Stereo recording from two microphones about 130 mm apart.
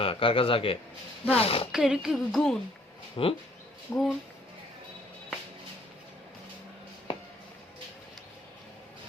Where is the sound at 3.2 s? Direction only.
40° left (ahead or behind).